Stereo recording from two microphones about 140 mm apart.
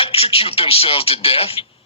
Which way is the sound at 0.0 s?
40° left (ahead or behind).